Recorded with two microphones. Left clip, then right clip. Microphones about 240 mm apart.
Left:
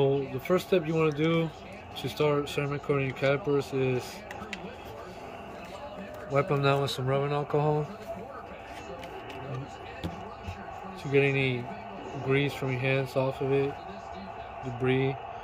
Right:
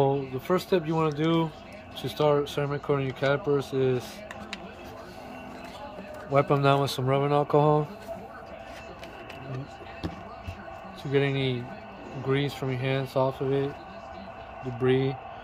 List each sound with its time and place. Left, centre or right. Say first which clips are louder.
0.5 s speech: right 1 dB; right
6.3 s speech: right 4 dB; right
11.1 s speech: left 1 dB; right
14.8 s speech: right 3 dB; right